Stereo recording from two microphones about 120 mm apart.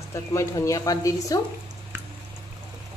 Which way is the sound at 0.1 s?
25° left (ahead or behind).